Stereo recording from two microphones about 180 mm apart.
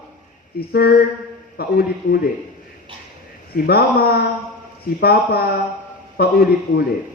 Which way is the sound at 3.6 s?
60° left (ahead or behind).